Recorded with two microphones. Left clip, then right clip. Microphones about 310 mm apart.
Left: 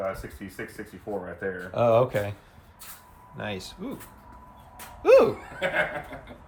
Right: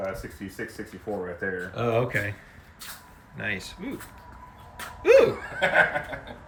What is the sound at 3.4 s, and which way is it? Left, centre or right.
Speech, centre.